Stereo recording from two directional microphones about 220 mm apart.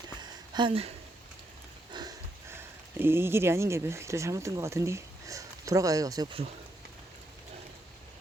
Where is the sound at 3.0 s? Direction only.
10° right (ahead or behind).